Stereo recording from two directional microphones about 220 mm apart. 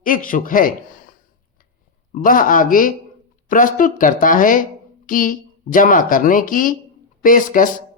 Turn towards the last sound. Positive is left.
turn(degrees=40)  # may be behind; listen again after turning